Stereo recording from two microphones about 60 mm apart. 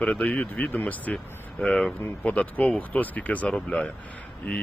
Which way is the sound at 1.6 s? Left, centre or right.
Centre.